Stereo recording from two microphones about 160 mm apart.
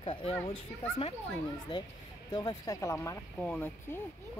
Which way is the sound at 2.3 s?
25° left (ahead or behind).